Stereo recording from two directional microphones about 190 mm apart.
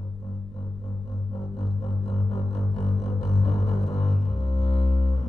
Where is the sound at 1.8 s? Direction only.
35° left (ahead or behind).